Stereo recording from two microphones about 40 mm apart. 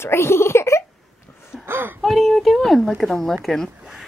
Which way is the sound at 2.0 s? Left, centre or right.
Centre.